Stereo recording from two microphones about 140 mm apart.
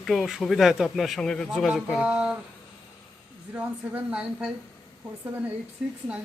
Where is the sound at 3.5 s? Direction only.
10° right (ahead or behind).